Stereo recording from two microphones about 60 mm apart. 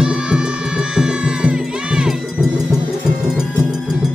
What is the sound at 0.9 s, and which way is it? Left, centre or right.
Music, centre.